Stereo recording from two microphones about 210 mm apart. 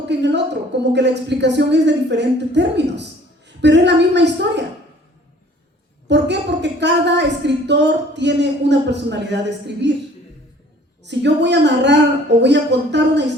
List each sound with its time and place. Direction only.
0.1 s a woman's voice: 55° right (ahead or behind)
6.1 s a woman's voice: 55° right (ahead or behind)
11.0 s a woman's voice: 55° right (ahead or behind)